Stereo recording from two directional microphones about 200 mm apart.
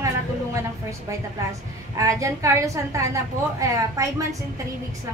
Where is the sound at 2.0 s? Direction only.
15° right (ahead or behind).